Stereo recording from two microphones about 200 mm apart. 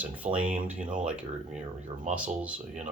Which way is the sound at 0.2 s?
35° right (ahead or behind).